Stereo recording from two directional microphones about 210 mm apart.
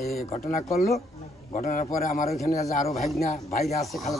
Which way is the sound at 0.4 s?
40° left (ahead or behind).